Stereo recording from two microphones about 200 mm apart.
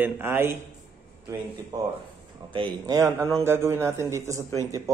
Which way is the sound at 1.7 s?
20° right (ahead or behind).